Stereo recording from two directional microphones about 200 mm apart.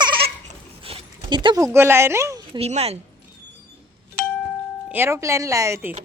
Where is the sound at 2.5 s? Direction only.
30° right (ahead or behind).